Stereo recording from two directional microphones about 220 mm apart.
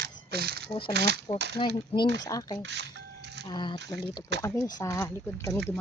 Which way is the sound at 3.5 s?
20° left (ahead or behind).